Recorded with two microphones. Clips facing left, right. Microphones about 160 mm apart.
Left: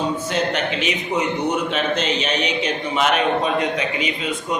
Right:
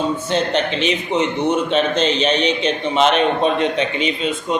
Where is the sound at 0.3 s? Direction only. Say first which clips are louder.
Right 4 dB; 30° right (ahead or behind).